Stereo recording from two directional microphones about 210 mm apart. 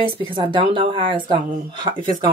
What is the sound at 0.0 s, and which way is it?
Speech, 25° right (ahead or behind).